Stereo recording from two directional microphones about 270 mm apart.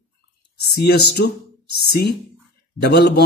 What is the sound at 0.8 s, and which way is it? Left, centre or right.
Speech, left.